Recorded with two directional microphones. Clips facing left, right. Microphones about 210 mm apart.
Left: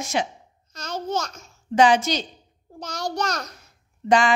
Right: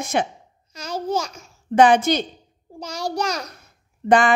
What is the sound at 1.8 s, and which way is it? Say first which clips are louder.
Speech: right 3 dB; 55° right (ahead or behind).